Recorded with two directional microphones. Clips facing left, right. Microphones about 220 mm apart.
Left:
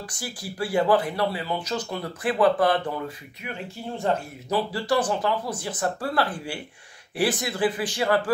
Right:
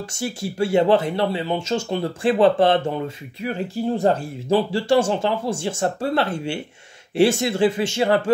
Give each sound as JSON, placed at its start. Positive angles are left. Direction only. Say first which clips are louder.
{"t": 0.1, "sound": "speech", "louder": "right 8 dB", "side_deg": -25}
{"t": 3.4, "sound": "speech", "louder": "right 10 dB", "side_deg": -35}